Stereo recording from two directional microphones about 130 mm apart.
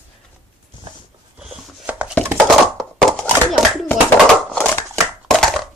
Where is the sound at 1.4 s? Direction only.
10° right (ahead or behind).